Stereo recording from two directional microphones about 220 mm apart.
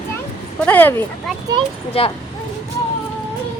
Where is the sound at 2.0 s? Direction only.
25° left (ahead or behind).